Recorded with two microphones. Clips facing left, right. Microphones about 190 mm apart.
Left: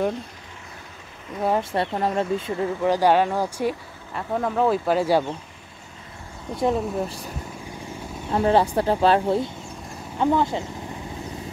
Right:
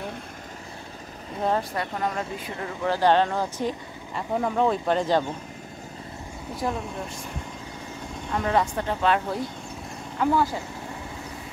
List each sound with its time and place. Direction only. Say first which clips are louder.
1.6 s speech: left 4 dB; 30° left (ahead or behind); by 3.7 s 10° left (ahead or behind)
4.1 s speech: left 1 dB; 5° right (ahead or behind)
6.5 s speech: left 7 dB; 30° left (ahead or behind)
8.3 s speech: left 5 dB; 30° left (ahead or behind)